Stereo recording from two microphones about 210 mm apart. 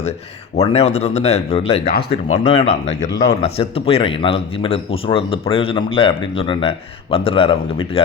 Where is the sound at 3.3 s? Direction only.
30° left (ahead or behind).